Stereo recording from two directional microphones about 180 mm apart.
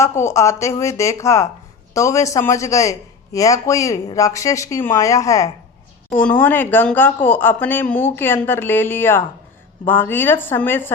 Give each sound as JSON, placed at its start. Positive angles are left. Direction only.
{"t": 0.2, "sound": "speech", "side_deg": 15}